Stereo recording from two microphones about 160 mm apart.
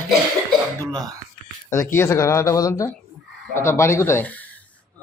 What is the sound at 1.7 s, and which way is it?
Speech, 15° left (ahead or behind).